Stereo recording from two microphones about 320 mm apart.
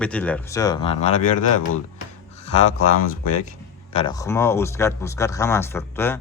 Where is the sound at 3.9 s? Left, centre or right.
Centre.